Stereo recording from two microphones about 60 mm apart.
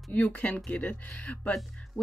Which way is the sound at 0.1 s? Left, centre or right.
Left.